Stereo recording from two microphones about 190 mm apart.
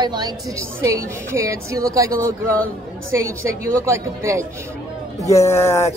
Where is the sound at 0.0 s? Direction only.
20° right (ahead or behind).